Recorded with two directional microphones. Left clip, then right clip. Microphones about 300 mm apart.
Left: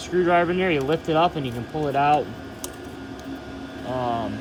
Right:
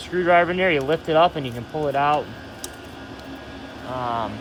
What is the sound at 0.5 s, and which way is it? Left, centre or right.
Speech, centre.